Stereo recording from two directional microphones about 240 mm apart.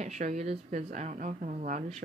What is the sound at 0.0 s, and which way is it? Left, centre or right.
Speech, right.